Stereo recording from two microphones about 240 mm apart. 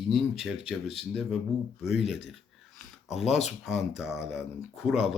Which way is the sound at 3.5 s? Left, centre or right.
Centre.